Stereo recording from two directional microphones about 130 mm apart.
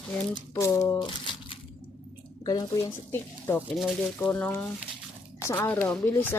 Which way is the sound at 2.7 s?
20° left (ahead or behind).